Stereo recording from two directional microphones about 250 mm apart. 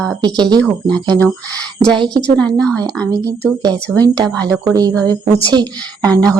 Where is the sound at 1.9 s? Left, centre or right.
Centre.